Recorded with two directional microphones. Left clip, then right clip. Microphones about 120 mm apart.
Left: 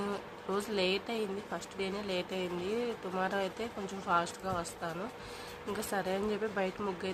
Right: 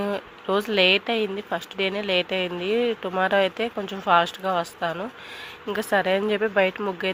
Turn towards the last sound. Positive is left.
turn(degrees=-45)  # may be behind; listen again after turning